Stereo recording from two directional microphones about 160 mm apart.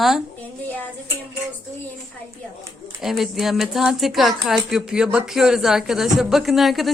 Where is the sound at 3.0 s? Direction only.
Centre (ahead or behind).